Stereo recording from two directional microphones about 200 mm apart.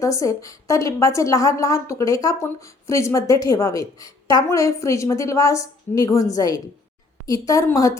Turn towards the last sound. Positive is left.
turn(degrees=15)  # may be behind; listen again after turning